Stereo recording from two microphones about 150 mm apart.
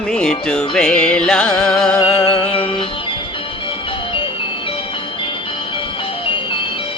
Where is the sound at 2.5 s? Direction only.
35° left (ahead or behind).